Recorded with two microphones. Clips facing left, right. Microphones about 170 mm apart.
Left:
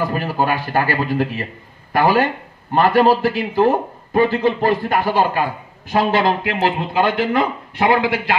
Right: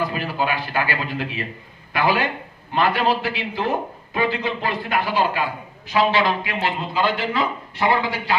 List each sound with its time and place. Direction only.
0.0 s a man's voice: 45° left (ahead or behind)